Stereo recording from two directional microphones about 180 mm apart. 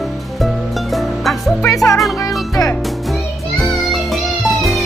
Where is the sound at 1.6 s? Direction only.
20° left (ahead or behind).